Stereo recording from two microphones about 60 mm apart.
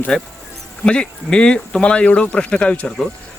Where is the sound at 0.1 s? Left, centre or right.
Centre.